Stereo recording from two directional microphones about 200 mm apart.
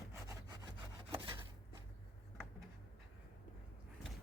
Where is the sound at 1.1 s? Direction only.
25° right (ahead or behind).